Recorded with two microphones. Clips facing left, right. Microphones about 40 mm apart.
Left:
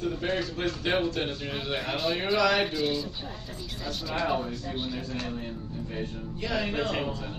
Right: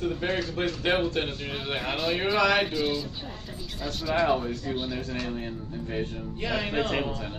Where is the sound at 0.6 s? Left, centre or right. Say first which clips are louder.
Right 3 dB; right.